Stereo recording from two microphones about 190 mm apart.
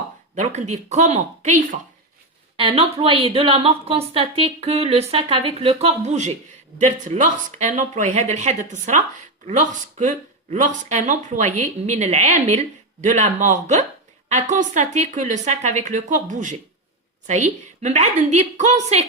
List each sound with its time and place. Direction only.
0.3 s speech: 35° right (ahead or behind)
2.6 s speech: 30° right (ahead or behind)